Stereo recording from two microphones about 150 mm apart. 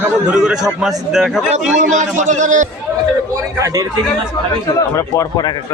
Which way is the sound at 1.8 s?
55° right (ahead or behind).